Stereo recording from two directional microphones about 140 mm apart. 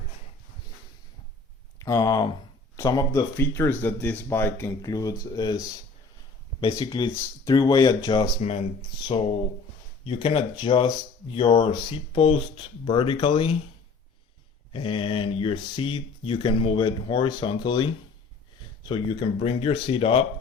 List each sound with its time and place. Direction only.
1.8 s speech: 25° left (ahead or behind)
8.4 s speech: 50° left (ahead or behind)
14.7 s speech: 40° left (ahead or behind)
19.4 s speech: 45° left (ahead or behind)